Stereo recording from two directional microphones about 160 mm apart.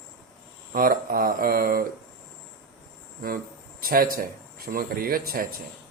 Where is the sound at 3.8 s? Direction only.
65° right (ahead or behind).